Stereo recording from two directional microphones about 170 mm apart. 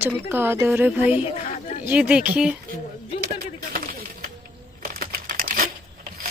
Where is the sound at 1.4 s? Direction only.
45° left (ahead or behind).